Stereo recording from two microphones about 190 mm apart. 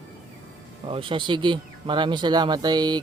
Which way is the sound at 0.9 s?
25° right (ahead or behind).